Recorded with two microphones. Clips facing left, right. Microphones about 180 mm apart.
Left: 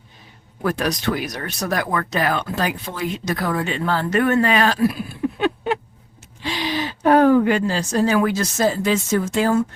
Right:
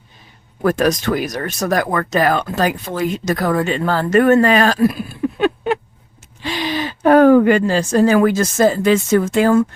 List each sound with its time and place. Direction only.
0.6 s speech: 45° right (ahead or behind)
5.4 s a sound: 50° right (ahead or behind)
6.4 s speech: 50° right (ahead or behind)